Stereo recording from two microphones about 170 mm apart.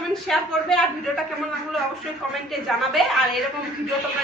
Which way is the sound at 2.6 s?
Centre (ahead or behind).